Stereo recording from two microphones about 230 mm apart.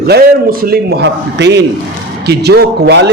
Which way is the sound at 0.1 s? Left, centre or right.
Right.